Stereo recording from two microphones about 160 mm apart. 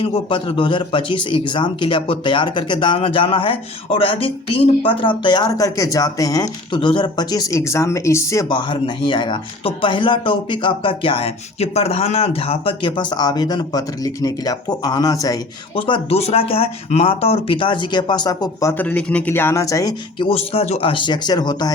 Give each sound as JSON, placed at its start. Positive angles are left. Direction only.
{"t": 0.0, "sound": "a man's voice", "side_deg": 35}
{"t": 15.7, "sound": "a man's voice", "side_deg": 35}
{"t": 18.7, "sound": "speech", "side_deg": 10}